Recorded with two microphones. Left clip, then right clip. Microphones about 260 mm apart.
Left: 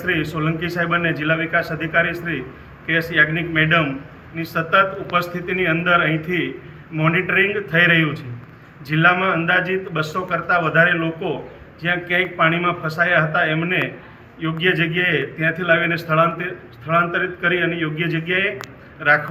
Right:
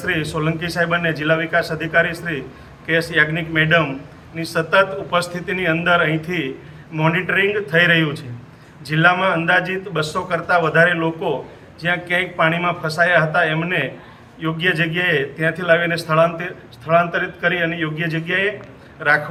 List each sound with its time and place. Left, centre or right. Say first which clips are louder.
0.0 s a man's voice: even; centre